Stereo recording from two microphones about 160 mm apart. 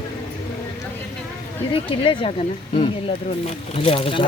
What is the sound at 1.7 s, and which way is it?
Speech, 30° left (ahead or behind).